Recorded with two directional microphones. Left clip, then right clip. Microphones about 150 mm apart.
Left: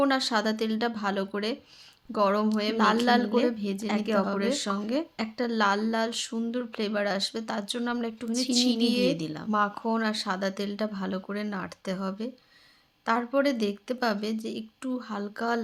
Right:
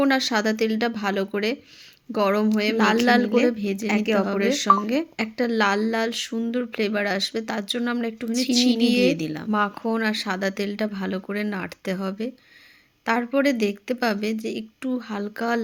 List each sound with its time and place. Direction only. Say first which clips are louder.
0.0 s a woman's voice: right 4 dB; 15° right (ahead or behind)